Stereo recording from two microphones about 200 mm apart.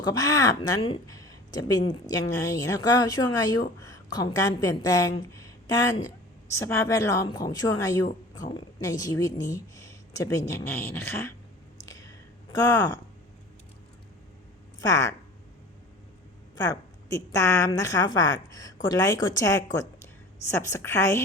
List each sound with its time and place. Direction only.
0.0 s speech: 15° left (ahead or behind)
11.9 s a sound: 15° left (ahead or behind)
14.8 s speech: 15° left (ahead or behind)
16.6 s a woman's voice: 15° left (ahead or behind)